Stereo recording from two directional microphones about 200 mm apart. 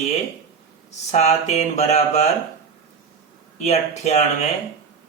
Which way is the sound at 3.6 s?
35° left (ahead or behind).